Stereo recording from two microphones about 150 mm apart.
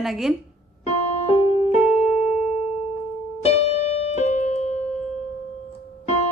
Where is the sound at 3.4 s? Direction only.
45° left (ahead or behind).